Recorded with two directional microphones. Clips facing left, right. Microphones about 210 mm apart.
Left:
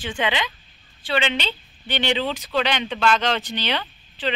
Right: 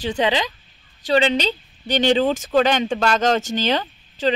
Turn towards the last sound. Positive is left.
turn(degrees=-45)  # may be behind; listen again after turning